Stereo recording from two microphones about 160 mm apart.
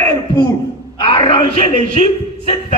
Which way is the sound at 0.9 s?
30° left (ahead or behind).